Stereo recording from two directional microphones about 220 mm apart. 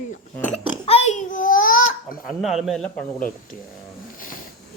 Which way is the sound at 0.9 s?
30° left (ahead or behind).